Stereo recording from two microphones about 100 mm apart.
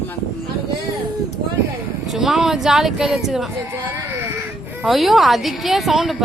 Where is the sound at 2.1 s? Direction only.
Centre (ahead or behind).